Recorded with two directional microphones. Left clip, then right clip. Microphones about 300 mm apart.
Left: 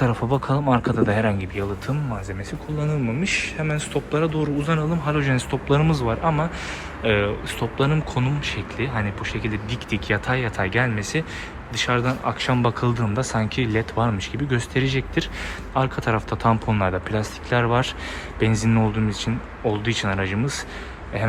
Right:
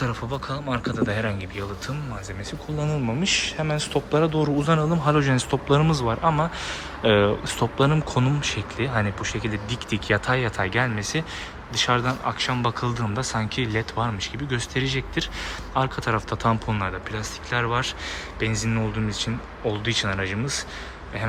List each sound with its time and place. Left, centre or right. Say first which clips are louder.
0.0 s speech: left 6 dB; centre